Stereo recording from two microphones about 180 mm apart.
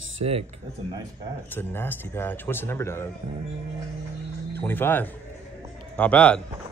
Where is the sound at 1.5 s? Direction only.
10° left (ahead or behind).